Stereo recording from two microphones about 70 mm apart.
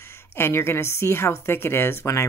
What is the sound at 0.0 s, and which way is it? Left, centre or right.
A woman's voice, left.